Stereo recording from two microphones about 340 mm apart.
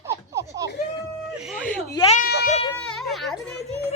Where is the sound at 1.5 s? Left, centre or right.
Centre.